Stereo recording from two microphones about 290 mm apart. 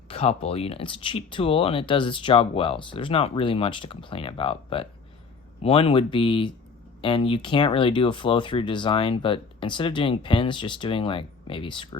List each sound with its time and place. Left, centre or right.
0.1 s speech: left